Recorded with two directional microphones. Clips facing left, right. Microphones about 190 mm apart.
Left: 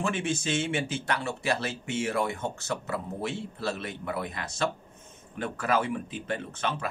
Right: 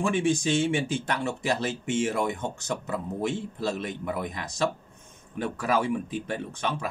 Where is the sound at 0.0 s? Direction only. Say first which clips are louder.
Right 5 dB; 15° right (ahead or behind).